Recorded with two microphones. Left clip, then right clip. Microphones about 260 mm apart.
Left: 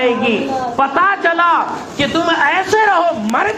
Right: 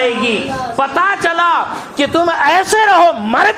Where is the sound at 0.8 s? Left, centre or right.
Right.